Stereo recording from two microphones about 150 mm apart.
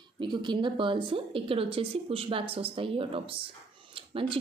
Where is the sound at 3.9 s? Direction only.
35° right (ahead or behind).